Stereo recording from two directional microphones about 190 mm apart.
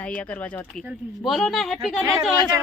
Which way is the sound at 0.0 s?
5° left (ahead or behind).